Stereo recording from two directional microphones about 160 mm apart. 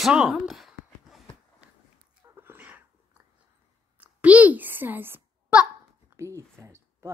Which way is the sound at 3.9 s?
10° right (ahead or behind).